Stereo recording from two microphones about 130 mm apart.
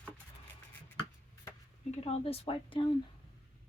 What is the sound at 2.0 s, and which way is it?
Speech, 50° left (ahead or behind).